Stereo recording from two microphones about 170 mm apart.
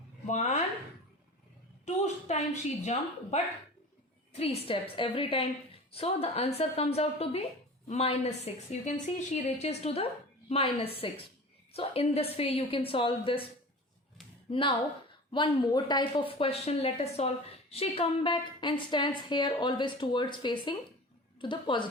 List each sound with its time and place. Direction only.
0.3 s speech: 45° left (ahead or behind)
1.8 s a woman's voice: 40° left (ahead or behind)
14.5 s speech: 30° left (ahead or behind)